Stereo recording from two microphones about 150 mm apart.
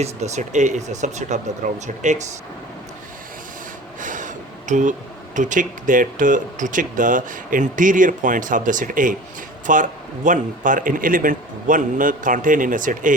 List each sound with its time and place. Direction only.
0.0 s speech: 50° right (ahead or behind)
4.0 s snort: 60° right (ahead or behind)
4.7 s speech: 55° right (ahead or behind)